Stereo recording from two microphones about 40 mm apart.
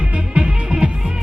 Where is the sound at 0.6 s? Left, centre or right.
Centre.